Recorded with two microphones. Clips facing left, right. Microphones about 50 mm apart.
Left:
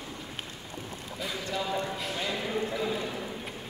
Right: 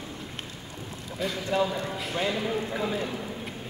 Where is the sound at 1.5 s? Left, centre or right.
Right.